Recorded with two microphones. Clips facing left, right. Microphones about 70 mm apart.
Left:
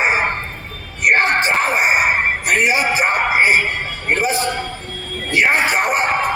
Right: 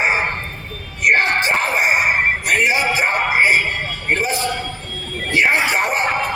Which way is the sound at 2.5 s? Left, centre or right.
Left.